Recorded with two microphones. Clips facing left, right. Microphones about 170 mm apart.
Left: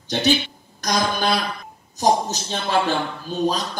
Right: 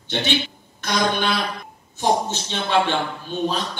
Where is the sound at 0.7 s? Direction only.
40° left (ahead or behind).